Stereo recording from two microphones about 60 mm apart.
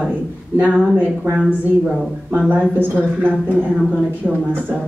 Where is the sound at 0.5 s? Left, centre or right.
Right.